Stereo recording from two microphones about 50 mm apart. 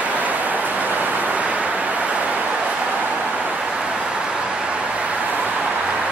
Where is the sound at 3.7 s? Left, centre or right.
Centre.